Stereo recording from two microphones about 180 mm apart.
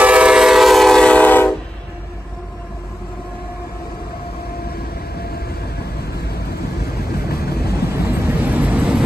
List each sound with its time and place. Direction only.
0.0 s train: 5° right (ahead or behind); by 1.5 s 10° left (ahead or behind)
4.7 s vehicle: 60° left (ahead or behind)
7.2 s vehicle: 60° left (ahead or behind)
7.9 s vehicle: 15° right (ahead or behind)